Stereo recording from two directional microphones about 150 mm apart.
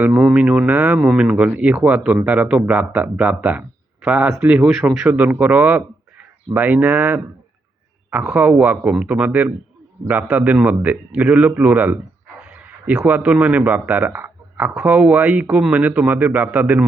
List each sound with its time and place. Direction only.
0.0 s speech: 10° right (ahead or behind)